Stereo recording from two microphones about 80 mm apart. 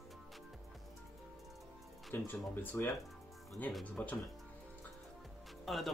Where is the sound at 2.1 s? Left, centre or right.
Left.